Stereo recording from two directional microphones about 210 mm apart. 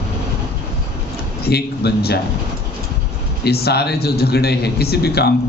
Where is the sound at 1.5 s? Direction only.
50° left (ahead or behind).